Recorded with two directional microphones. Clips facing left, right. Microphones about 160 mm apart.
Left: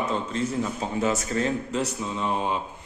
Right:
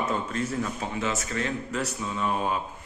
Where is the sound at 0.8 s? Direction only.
35° left (ahead or behind).